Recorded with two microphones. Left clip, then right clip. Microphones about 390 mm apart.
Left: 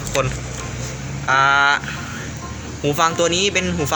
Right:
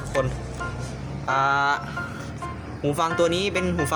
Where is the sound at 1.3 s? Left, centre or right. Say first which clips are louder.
Left 7 dB; right.